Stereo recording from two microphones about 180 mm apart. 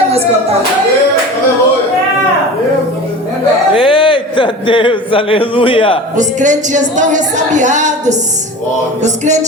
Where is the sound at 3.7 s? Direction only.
30° left (ahead or behind).